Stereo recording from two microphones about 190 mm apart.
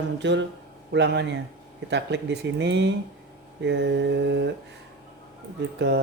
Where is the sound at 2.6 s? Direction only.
60° right (ahead or behind).